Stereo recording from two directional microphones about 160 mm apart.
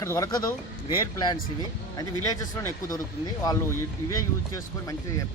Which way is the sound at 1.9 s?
20° left (ahead or behind).